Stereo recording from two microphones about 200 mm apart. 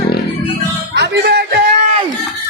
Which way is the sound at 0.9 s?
55° right (ahead or behind).